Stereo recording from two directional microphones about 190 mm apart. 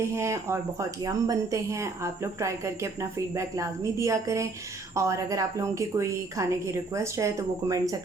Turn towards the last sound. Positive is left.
turn(degrees=-20)  # may be behind; listen again after turning